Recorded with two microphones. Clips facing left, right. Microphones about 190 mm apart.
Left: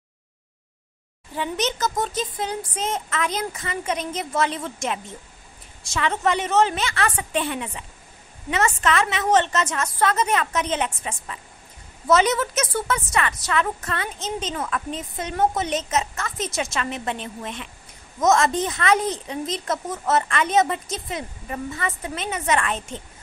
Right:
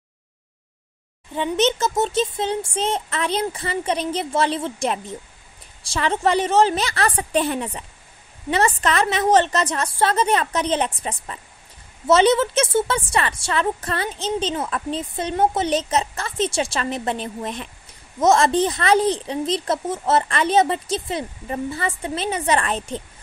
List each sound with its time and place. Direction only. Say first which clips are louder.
1.3 s a woman's voice: right 6 dB; 25° right (ahead or behind)